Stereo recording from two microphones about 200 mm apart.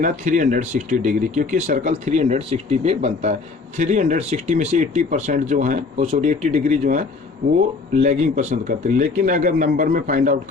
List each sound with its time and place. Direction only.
0.0 s speech: 40° right (ahead or behind)
8.0 s speech: 35° right (ahead or behind)